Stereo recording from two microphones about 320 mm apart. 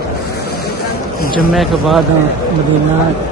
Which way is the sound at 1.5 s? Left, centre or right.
Centre.